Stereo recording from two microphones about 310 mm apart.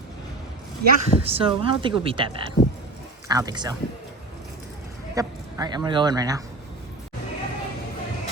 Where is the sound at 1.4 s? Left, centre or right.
Centre.